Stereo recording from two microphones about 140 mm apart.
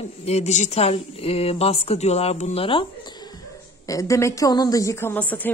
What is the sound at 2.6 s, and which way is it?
Speech, 35° left (ahead or behind).